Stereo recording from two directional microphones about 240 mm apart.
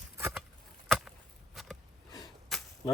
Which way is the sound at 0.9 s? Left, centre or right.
Centre.